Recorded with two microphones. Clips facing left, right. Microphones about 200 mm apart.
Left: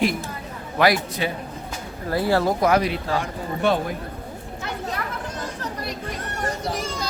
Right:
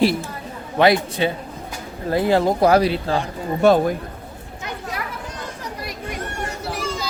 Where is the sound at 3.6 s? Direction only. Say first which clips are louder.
Right 7 dB; 45° right (ahead or behind).